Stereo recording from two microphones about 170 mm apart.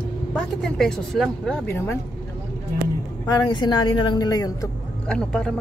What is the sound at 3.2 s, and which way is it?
Speech, 25° left (ahead or behind).